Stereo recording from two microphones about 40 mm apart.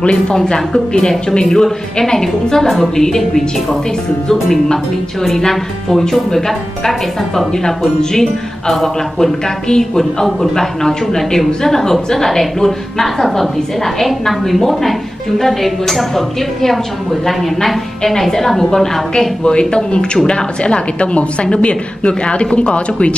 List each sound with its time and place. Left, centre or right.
0.0 s a woman's voice: centre